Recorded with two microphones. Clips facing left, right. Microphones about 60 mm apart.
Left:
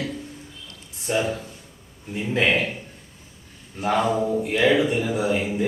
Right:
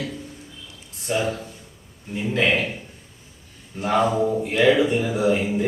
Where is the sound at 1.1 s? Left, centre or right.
Centre.